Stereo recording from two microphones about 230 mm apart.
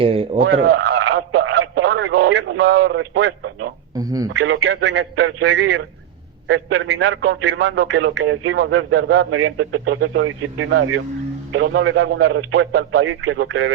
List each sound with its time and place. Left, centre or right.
0.0 s speech: right
0.5 s a sound: right
1.3 s radio: right
1.9 s radio: right
2.2 s a man's voice: right
3.9 s speech: centre
4.3 s a man's voice: right
6.5 s a man's voice: right
7.3 s speech: right